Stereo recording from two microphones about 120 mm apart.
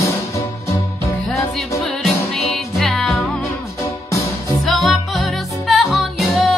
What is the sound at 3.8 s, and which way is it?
Music, 25° left (ahead or behind).